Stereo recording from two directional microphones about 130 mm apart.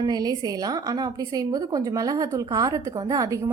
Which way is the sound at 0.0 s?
30° right (ahead or behind).